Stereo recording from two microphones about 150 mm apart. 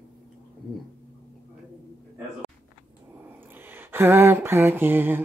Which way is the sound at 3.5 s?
15° right (ahead or behind).